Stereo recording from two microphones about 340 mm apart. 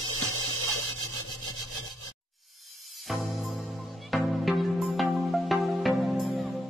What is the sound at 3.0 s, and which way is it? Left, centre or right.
Music, centre.